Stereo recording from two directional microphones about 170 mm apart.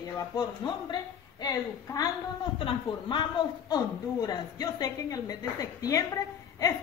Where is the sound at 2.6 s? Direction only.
25° left (ahead or behind).